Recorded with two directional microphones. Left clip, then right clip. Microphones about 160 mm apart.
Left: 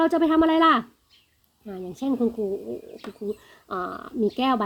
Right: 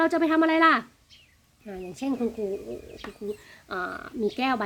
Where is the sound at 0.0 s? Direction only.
25° left (ahead or behind).